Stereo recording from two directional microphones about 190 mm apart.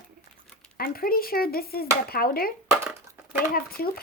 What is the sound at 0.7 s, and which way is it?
A child's voice, 50° left (ahead or behind).